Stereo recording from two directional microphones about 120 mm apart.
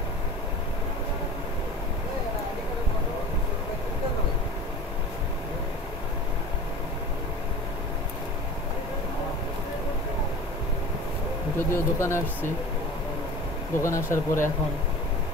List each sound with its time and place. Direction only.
11.7 s speech: 20° left (ahead or behind)
13.7 s speech: 25° left (ahead or behind)